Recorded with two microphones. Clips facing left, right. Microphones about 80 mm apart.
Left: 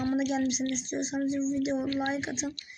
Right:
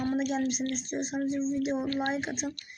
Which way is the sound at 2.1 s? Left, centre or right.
Right.